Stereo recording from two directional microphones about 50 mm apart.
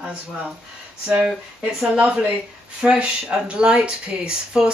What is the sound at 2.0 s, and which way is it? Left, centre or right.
Speech, right.